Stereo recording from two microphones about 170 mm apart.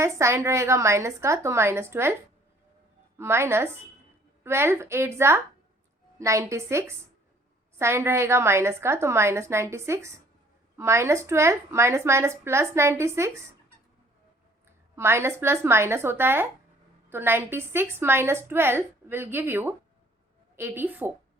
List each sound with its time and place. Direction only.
0.0 s a woman's voice: 15° right (ahead or behind)
3.2 s a woman's voice: 15° right (ahead or behind)
14.9 s a woman's voice: 15° right (ahead or behind)